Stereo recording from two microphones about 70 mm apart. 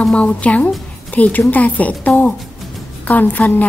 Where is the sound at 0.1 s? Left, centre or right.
Centre.